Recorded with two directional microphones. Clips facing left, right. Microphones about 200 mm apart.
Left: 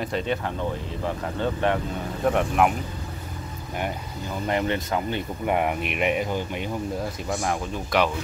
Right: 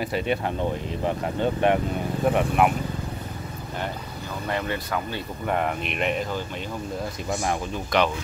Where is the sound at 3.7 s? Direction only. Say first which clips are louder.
Left 3 dB; 15° left (ahead or behind).